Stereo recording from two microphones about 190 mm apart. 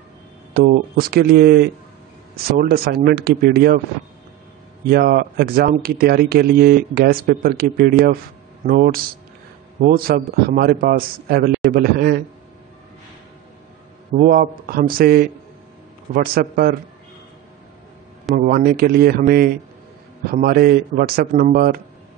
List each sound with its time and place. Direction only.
0.6 s speech: 55° right (ahead or behind)
4.8 s speech: 55° right (ahead or behind)
14.1 s speech: 45° right (ahead or behind)
18.3 s speech: 50° right (ahead or behind)